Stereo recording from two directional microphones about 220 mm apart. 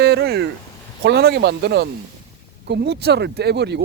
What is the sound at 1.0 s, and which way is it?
Speech, 50° right (ahead or behind).